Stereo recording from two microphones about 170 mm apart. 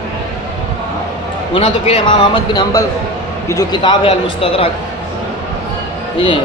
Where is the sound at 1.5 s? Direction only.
30° left (ahead or behind).